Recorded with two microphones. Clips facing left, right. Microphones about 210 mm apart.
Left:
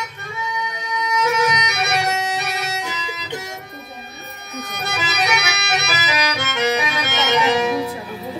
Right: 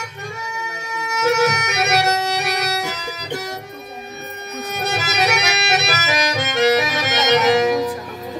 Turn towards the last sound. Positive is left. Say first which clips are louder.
# right 3 dB
turn(degrees=-40)  # may be behind; listen again after turning